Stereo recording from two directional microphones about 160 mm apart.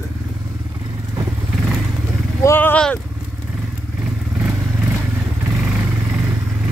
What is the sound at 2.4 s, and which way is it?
Speech, 15° left (ahead or behind).